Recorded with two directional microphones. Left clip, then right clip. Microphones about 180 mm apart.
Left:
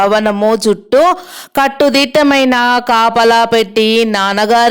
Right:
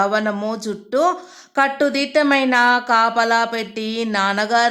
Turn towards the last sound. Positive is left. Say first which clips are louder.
# left 7 dB
turn(degrees=40)  # may be behind; listen again after turning